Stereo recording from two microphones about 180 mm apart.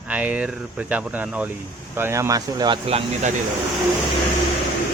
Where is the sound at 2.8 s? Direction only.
35° right (ahead or behind).